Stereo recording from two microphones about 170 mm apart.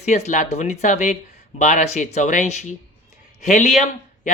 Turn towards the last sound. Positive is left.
turn(degrees=40)  # may be behind; listen again after turning